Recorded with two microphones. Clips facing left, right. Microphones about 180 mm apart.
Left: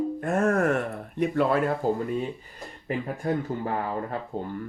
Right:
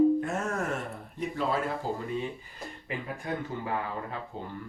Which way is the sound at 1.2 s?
60° left (ahead or behind).